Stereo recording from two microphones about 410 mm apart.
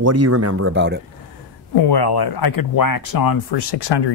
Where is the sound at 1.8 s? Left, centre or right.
Left.